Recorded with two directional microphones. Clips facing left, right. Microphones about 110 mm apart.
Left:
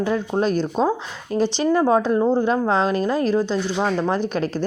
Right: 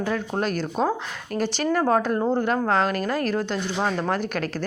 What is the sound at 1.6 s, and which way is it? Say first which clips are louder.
Speech: left 3 dB; 20° left (ahead or behind).